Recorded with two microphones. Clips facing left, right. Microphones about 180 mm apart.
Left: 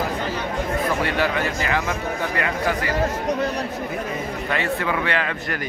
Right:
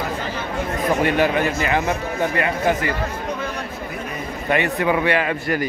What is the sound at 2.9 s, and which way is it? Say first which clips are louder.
Speech: left 3 dB; 40° left (ahead or behind).